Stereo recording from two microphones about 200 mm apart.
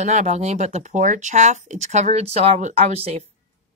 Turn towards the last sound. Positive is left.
turn(degrees=-30)  # may be behind; listen again after turning